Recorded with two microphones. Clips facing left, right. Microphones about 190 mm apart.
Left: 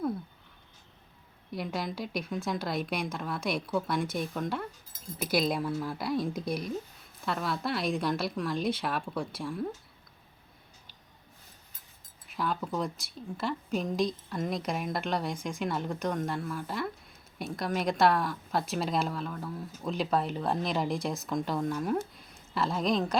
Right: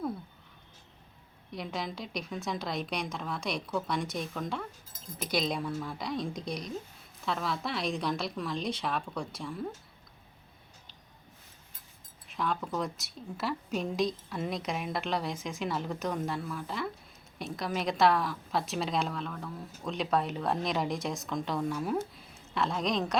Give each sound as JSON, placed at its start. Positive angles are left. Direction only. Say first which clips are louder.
{"t": 1.5, "sound": "a woman's voice", "louder": "left 3 dB", "side_deg": 0}
{"t": 12.3, "sound": "a woman's voice", "louder": "left 1 dB", "side_deg": 5}